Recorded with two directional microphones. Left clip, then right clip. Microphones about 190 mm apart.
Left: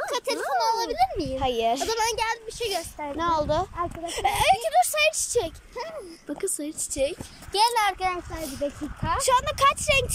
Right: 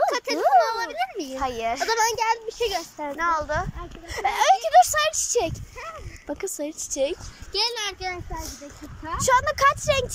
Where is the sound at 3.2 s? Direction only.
20° left (ahead or behind); by 7.2 s centre (ahead or behind).